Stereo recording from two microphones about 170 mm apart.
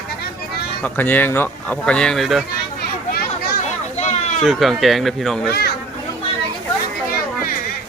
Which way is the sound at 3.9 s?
40° left (ahead or behind).